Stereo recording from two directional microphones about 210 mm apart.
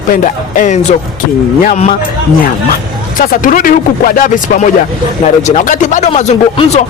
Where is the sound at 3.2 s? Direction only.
40° left (ahead or behind).